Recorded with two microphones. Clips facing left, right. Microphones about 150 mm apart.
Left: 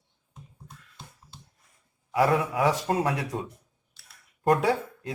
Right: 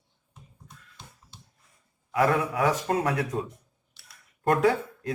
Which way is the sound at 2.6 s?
10° left (ahead or behind).